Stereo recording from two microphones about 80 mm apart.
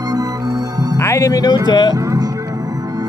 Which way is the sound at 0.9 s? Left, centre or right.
Left.